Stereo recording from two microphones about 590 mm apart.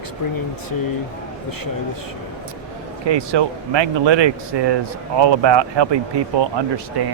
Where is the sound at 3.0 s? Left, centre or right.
Right.